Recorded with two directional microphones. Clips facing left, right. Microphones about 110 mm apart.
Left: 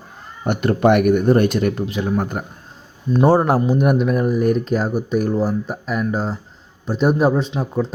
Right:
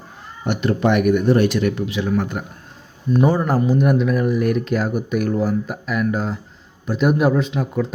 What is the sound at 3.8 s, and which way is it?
Speech, 50° left (ahead or behind).